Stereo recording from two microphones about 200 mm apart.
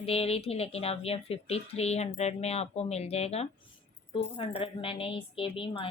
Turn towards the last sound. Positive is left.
turn(degrees=25)  # may be behind; listen again after turning